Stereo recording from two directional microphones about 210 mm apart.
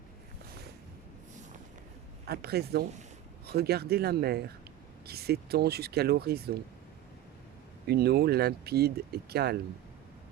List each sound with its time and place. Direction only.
2.2 s speech: 50° right (ahead or behind)
7.9 s speech: 50° right (ahead or behind)